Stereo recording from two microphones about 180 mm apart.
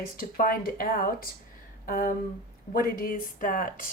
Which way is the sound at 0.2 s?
50° left (ahead or behind).